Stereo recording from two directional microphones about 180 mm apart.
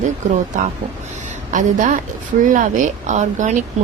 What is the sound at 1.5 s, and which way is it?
Speech, 45° right (ahead or behind).